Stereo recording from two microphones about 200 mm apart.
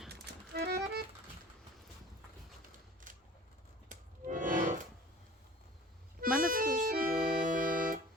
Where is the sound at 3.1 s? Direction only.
40° right (ahead or behind).